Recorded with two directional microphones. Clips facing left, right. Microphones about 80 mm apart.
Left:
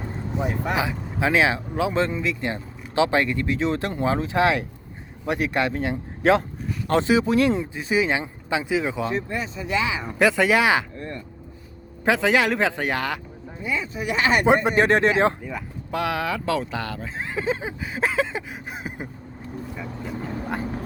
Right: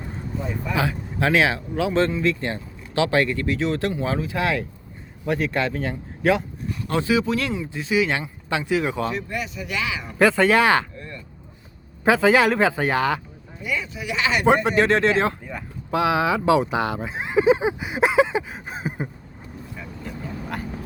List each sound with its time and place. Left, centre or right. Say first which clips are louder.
0.3 s speech: left 3 dB; left
0.8 s a man's voice: right 1 dB; centre; by 8.1 s left
8.4 s a man's voice: right 1 dB; centre
9.1 s speech: left 1 dB; left
10.2 s a man's voice: right 2 dB; centre
10.9 s vehicle: left 4 dB; left
12.0 s speech: right 3 dB; centre
13.6 s speech: left 1 dB; left
14.5 s speech: right 2 dB; left
15.4 s speech: even; centre
18.7 s a sound: right 5 dB; centre
19.7 s vehicle: even; centre